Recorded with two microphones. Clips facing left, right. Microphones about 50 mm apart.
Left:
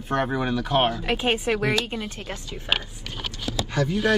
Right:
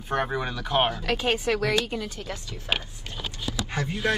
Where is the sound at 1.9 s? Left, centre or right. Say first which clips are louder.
Even; left.